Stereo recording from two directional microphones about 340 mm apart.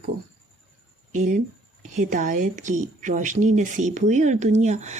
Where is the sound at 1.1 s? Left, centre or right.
Right.